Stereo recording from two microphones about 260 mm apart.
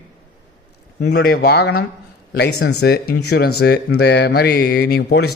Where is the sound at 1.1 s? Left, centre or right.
Left.